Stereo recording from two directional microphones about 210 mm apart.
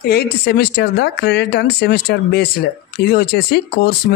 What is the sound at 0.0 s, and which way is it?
Speech, 50° left (ahead or behind).